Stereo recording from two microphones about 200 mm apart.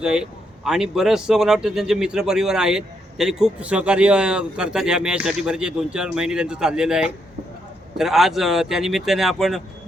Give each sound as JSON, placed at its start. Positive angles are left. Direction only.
{"t": 0.0, "sound": "speech", "side_deg": -5}